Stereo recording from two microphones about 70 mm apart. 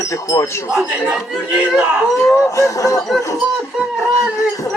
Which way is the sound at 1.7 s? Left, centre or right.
Centre.